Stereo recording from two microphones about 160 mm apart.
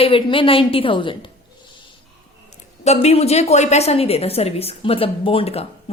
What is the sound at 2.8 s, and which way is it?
A woman's voice, 45° left (ahead or behind).